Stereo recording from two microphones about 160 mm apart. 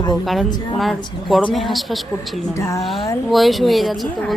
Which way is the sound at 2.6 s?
20° left (ahead or behind).